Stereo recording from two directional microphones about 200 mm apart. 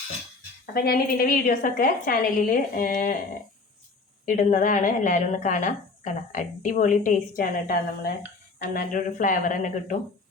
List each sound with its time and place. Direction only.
0.6 s a woman's voice: 50° left (ahead or behind)
4.3 s a woman's voice: 40° left (ahead or behind)